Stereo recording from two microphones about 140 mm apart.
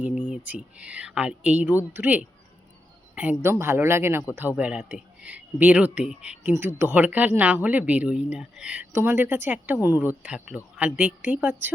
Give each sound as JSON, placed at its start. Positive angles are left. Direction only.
{"t": 0.3, "sound": "speech", "side_deg": -10}